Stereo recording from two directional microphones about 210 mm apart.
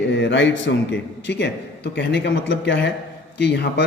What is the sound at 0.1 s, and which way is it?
A man's voice, 55° left (ahead or behind).